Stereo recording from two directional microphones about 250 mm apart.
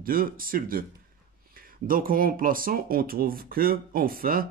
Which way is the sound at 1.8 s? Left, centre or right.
Right.